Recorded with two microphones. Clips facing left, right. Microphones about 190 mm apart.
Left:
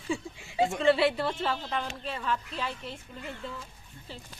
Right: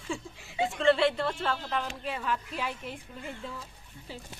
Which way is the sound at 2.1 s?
10° right (ahead or behind).